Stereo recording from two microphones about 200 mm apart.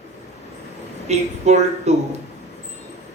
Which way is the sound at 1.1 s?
35° right (ahead or behind).